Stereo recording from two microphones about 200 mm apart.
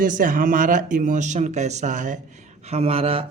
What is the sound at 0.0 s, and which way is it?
Speech, 45° right (ahead or behind).